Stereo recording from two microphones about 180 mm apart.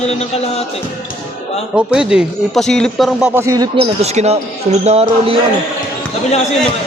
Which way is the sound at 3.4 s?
20° right (ahead or behind).